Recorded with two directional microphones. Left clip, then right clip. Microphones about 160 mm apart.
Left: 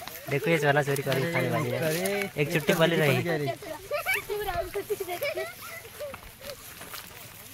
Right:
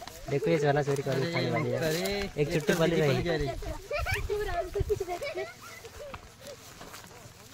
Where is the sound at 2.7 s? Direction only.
25° left (ahead or behind).